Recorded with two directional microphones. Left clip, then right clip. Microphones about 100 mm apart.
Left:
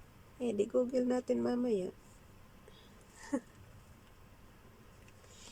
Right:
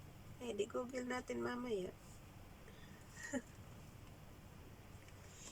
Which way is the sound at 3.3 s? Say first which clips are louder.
Left 8 dB; 55° left (ahead or behind).